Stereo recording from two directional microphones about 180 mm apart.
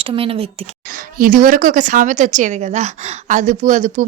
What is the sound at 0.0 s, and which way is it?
Speech, 30° right (ahead or behind).